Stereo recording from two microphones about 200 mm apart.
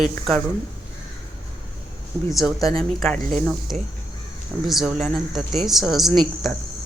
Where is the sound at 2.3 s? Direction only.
Centre (ahead or behind).